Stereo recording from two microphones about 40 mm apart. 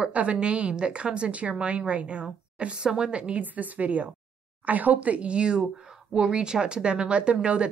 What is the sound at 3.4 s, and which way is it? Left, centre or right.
A woman's voice, right.